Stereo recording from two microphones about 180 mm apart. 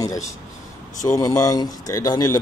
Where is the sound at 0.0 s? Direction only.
20° left (ahead or behind).